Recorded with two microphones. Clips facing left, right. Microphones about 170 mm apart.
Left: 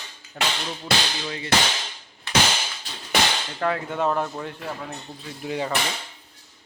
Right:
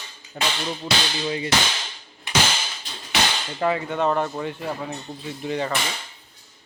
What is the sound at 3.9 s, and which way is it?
Speech, 5° left (ahead or behind).